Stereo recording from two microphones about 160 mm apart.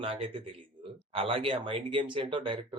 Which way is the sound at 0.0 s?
35° right (ahead or behind).